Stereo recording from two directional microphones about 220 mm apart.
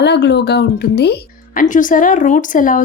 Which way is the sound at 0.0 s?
50° left (ahead or behind).